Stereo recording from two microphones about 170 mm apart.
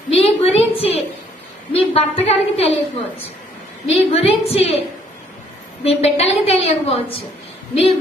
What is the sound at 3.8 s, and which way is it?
Speech, 35° left (ahead or behind).